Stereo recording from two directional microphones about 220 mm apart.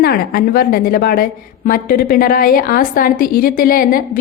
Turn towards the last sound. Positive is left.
turn(degrees=40)  # may be behind; listen again after turning